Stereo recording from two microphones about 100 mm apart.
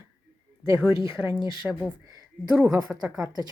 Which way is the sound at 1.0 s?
25° right (ahead or behind).